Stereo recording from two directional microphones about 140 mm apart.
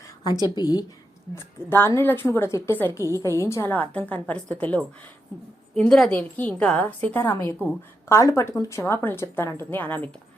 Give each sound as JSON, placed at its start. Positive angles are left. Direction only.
{"t": 0.5, "sound": "a woman's voice", "side_deg": 30}